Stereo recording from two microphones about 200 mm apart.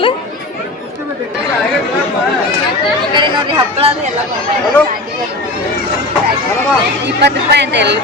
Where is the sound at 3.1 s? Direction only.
25° right (ahead or behind).